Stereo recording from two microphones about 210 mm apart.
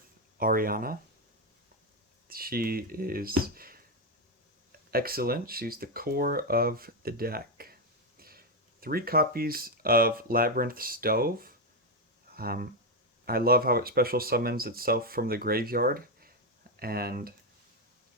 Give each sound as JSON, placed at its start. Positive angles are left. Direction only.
{"t": 0.3, "sound": "speech", "side_deg": -45}
{"t": 2.2, "sound": "speech", "side_deg": -45}